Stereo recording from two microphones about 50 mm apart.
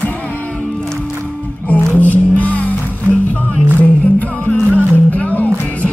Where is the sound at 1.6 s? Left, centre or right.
Left.